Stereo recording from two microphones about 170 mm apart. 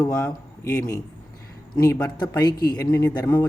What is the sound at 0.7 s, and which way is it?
Speech, 20° left (ahead or behind).